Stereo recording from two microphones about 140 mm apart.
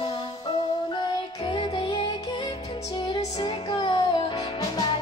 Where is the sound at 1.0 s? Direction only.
35° left (ahead or behind).